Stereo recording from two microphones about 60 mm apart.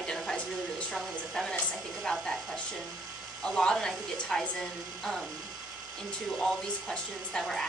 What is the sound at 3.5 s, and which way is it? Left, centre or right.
Speech, centre.